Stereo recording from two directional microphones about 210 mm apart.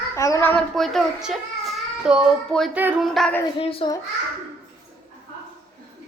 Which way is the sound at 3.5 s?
25° left (ahead or behind).